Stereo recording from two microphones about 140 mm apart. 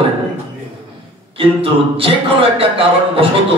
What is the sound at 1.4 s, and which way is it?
A man's voice, 40° right (ahead or behind).